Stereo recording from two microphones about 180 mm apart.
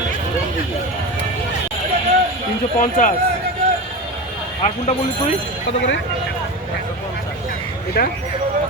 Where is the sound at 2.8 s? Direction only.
50° left (ahead or behind).